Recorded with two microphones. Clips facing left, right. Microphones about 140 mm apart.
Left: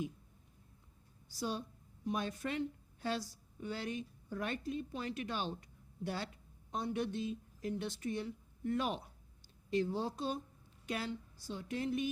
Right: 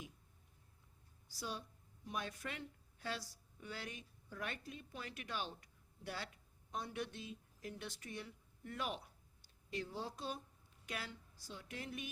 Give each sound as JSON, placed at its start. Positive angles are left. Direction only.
{"t": 1.4, "sound": "a woman's voice", "side_deg": 30}